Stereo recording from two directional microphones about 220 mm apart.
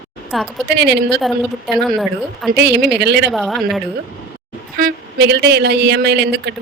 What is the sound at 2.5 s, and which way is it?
Speech, 50° right (ahead or behind).